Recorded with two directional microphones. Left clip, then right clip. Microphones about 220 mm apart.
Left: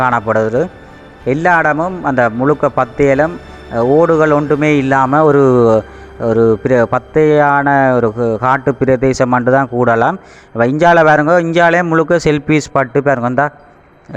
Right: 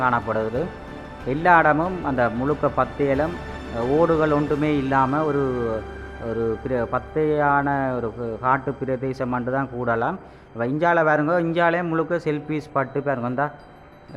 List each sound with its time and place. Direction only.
0.0 s a man's voice: 30° left (ahead or behind)